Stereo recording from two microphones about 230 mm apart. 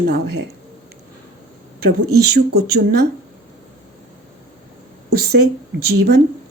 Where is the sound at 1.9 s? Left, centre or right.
Right.